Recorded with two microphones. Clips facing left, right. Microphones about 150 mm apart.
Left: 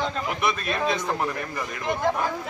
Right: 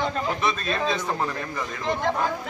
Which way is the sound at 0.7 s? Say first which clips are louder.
Even; 15° left (ahead or behind).